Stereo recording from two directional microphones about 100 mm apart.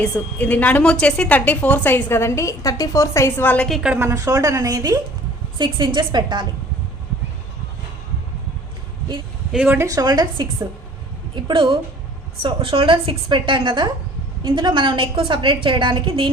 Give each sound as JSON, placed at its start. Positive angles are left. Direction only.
{"t": 0.0, "sound": "a woman's voice", "side_deg": 15}
{"t": 3.7, "sound": "a woman's voice", "side_deg": 0}
{"t": 3.9, "sound": "a woman's voice", "side_deg": -25}
{"t": 5.5, "sound": "a woman's voice", "side_deg": -55}
{"t": 9.8, "sound": "a woman's voice", "side_deg": -35}
{"t": 11.3, "sound": "a woman's voice", "side_deg": -55}